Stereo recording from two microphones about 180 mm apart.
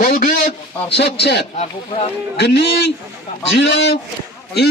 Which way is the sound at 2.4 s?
70° left (ahead or behind).